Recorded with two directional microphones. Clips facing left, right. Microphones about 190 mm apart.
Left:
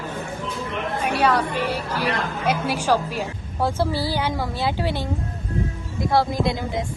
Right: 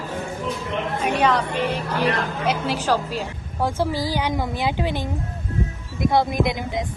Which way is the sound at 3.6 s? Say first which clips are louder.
Even; 15° right (ahead or behind).